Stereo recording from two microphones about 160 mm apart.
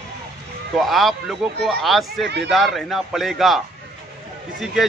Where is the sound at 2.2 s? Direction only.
90° right.